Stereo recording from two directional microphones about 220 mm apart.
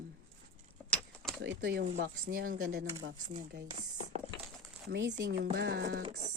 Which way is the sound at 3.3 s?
50° right (ahead or behind).